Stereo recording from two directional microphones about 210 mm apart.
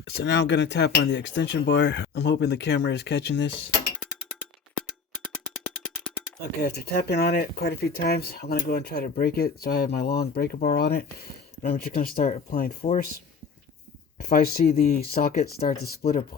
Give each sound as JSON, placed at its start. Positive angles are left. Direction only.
{"t": 0.0, "sound": "speech", "side_deg": 55}
{"t": 6.4, "sound": "speech", "side_deg": 50}
{"t": 14.3, "sound": "speech", "side_deg": 45}